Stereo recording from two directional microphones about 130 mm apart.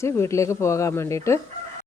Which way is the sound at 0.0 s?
20° left (ahead or behind).